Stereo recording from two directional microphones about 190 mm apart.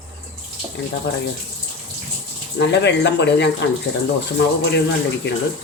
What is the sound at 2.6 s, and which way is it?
Speech, 65° left (ahead or behind).